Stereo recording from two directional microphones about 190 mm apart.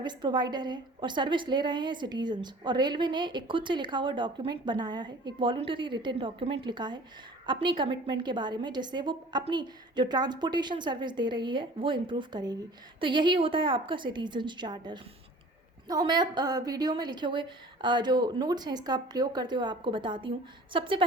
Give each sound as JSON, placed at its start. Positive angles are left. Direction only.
{"t": 0.0, "sound": "a woman's voice", "side_deg": -25}